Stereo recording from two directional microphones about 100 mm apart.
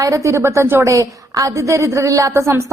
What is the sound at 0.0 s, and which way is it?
A woman's voice, 30° right (ahead or behind).